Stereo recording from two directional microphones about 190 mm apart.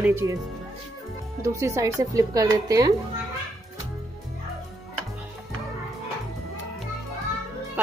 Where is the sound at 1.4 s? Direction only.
15° right (ahead or behind).